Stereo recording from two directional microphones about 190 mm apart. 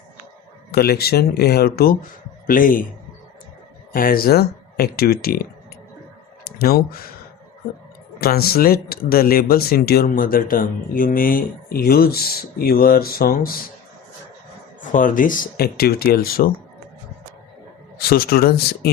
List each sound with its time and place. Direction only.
0.7 s speech: 55° left (ahead or behind)
3.9 s speech: 50° left (ahead or behind)
6.6 s speech: 50° left (ahead or behind)
8.2 s speech: 55° left (ahead or behind)
14.8 s speech: 45° left (ahead or behind)
17.9 s speech: 50° left (ahead or behind)